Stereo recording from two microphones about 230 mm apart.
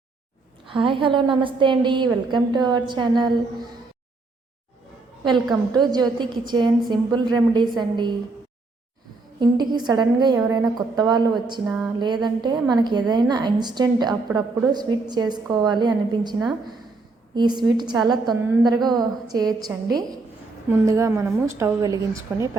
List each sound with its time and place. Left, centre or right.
0.7 s a woman's voice: right
5.7 s a woman's voice: centre
9.4 s a woman's voice: centre
11.6 s speech: centre
11.9 s a woman's voice: centre